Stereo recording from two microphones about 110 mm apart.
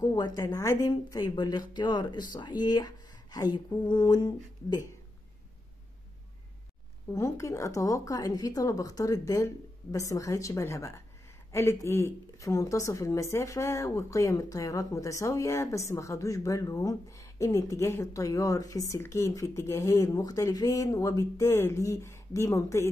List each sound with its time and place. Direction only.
0.0 s a woman's voice: 35° left (ahead or behind)
7.1 s speech: 30° left (ahead or behind)